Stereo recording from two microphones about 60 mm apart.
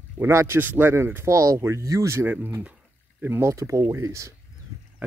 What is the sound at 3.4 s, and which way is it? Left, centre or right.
Speech, right.